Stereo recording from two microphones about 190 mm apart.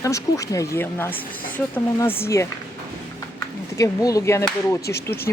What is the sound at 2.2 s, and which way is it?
Speech, 15° left (ahead or behind).